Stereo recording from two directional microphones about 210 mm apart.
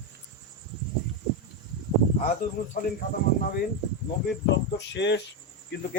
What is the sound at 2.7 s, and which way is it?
Speech, 40° left (ahead or behind).